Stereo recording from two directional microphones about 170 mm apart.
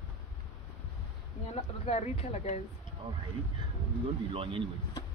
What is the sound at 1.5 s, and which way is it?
Speech, 35° left (ahead or behind).